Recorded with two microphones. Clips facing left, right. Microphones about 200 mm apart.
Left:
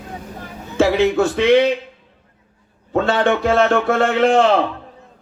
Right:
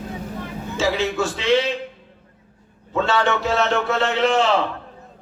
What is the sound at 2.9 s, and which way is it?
A man's voice, 55° left (ahead or behind).